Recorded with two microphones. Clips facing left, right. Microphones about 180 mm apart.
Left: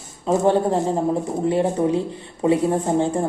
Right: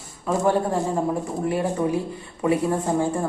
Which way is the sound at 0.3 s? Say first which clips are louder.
Left 4 dB; 25° left (ahead or behind).